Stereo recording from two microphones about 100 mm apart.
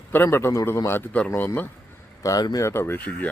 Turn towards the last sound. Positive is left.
turn(degrees=20)  # may be behind; listen again after turning